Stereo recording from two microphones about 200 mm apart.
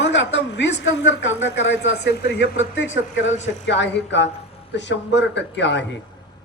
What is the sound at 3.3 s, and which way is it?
Speech, 35° left (ahead or behind).